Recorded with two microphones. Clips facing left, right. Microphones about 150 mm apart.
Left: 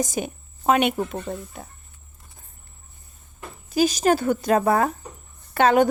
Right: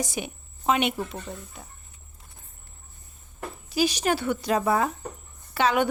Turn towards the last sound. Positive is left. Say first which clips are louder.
# left 6 dB
turn(degrees=45)  # may be behind; listen again after turning